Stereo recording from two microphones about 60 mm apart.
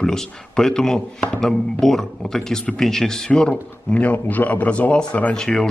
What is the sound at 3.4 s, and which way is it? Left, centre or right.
Speech, left.